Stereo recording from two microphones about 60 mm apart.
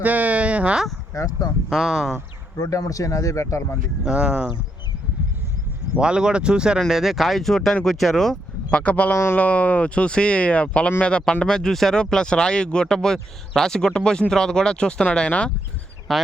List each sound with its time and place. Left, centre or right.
0.0 s speech: right
1.1 s speech: left
1.7 s speech: centre
2.6 s speech: left
4.0 s speech: centre
6.0 s speech: centre
6.7 s speech: centre
8.7 s speech: left
16.1 s speech: centre